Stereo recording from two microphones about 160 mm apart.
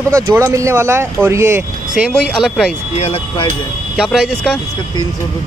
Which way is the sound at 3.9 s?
Centre (ahead or behind).